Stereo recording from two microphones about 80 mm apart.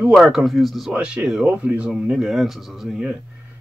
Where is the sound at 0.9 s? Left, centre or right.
Centre.